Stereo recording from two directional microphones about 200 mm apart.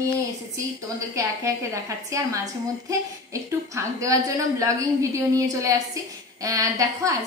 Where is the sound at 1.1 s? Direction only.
15° right (ahead or behind).